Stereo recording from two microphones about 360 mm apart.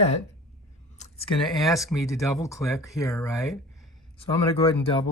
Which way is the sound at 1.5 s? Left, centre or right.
Centre.